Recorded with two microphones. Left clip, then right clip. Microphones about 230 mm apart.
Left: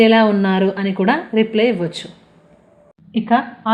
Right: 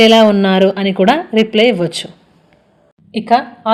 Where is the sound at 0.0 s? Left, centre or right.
Right.